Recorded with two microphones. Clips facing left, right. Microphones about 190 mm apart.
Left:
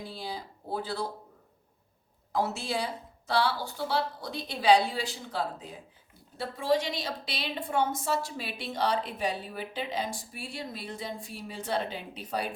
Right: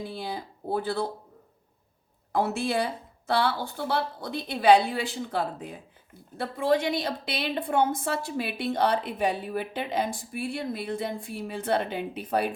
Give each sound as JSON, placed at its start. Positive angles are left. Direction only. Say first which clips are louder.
{"t": 0.0, "sound": "a woman's voice", "louder": "right 4 dB", "side_deg": -55}
{"t": 2.3, "sound": "a woman's voice", "louder": "right 4 dB", "side_deg": -55}